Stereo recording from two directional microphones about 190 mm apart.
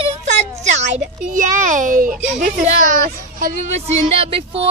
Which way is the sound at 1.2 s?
40° right (ahead or behind).